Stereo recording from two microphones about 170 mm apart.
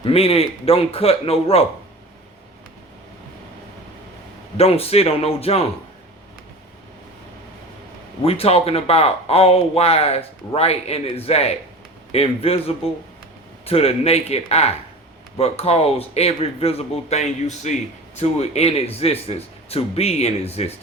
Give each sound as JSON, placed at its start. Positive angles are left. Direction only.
{"t": 0.0, "sound": "speech", "side_deg": 35}
{"t": 4.5, "sound": "speech", "side_deg": 35}
{"t": 8.2, "sound": "speech", "side_deg": 35}